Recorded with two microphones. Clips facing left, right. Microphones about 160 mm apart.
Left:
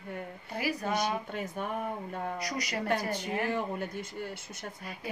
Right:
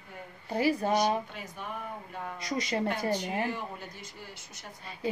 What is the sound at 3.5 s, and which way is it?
Speech, 55° left (ahead or behind).